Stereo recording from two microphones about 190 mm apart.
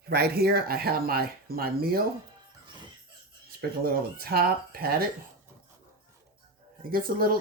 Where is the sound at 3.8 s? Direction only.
55° right (ahead or behind).